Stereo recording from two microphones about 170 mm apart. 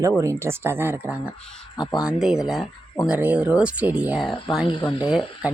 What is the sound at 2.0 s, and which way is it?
Speech, 5° right (ahead or behind).